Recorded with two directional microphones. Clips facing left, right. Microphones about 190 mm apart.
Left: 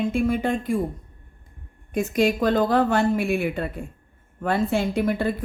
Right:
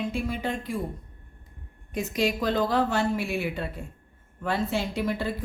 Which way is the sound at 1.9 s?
50° left (ahead or behind).